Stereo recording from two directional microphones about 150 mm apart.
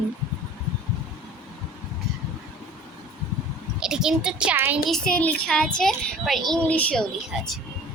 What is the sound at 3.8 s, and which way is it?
A woman's voice, 5° right (ahead or behind).